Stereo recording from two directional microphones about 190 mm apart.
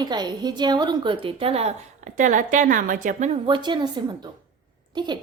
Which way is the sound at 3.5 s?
25° right (ahead or behind).